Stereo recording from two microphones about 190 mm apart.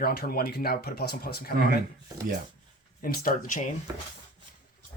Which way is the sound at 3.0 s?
45° left (ahead or behind).